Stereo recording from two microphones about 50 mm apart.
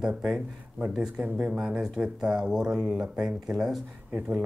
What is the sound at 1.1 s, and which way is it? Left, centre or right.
Speech, right.